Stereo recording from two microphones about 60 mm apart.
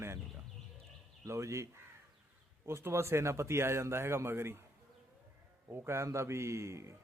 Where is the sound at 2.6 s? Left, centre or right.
Right.